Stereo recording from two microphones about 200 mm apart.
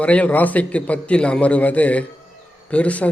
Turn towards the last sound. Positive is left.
turn(degrees=5)  # may be behind; listen again after turning